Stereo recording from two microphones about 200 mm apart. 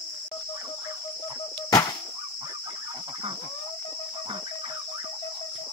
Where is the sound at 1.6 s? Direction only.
20° left (ahead or behind).